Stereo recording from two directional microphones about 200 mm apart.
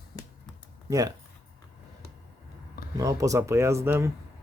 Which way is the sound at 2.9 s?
15° right (ahead or behind).